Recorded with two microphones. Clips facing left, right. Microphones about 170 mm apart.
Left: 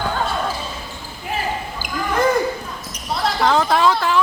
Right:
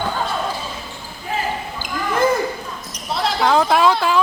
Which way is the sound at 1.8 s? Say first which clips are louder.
Right 1 dB; 10° left (ahead or behind).